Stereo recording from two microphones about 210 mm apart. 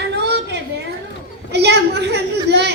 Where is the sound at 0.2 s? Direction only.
55° right (ahead or behind).